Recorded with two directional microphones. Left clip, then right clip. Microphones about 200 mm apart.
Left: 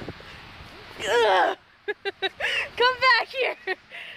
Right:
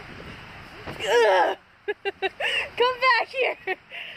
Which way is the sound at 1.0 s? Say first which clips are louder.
Right 1 dB; 5° left (ahead or behind).